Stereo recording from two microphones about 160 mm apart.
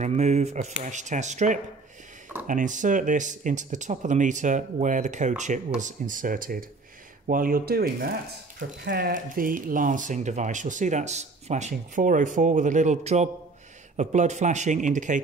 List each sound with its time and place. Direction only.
0.0 s speech: 45° right (ahead or behind)